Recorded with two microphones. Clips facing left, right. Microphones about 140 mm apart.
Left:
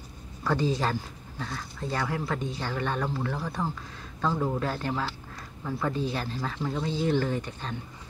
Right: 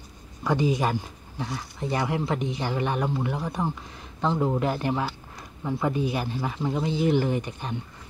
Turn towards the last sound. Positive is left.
turn(degrees=-15)  # may be behind; listen again after turning